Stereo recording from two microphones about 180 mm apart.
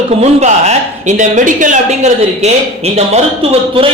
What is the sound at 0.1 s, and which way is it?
A man's voice, 40° right (ahead or behind).